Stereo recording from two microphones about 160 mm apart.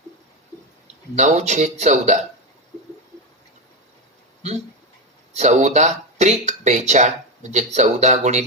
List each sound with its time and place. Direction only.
1.1 s speech: 45° right (ahead or behind)
5.4 s speech: 45° right (ahead or behind)